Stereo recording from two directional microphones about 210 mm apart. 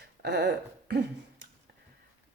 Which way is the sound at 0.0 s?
50° right (ahead or behind).